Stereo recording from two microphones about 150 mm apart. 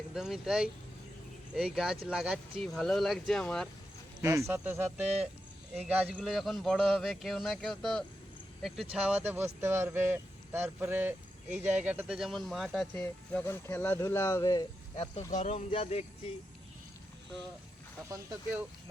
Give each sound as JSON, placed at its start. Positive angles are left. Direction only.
{"t": 0.1, "sound": "speech", "side_deg": -5}
{"t": 4.2, "sound": "speech", "side_deg": -20}
{"t": 14.9, "sound": "speech", "side_deg": 40}
{"t": 15.3, "sound": "speech", "side_deg": 50}